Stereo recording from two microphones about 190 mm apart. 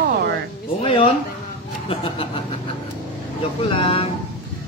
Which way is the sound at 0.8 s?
30° left (ahead or behind).